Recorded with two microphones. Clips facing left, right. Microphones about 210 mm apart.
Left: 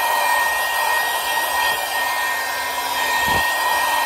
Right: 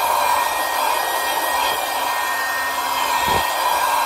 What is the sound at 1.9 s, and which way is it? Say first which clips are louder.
Hair dryer: right 2 dB; centre (ahead or behind).